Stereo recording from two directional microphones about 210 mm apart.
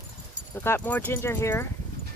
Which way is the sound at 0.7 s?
10° left (ahead or behind).